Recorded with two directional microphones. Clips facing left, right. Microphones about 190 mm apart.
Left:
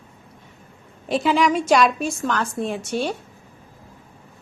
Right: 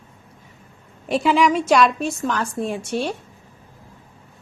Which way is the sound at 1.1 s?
Centre (ahead or behind).